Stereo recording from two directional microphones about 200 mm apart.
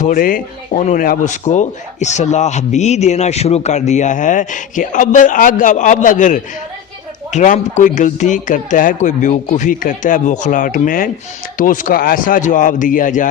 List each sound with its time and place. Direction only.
0.0 s speech: 45° left (ahead or behind)